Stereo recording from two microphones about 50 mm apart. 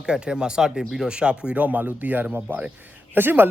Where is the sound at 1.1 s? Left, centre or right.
Right.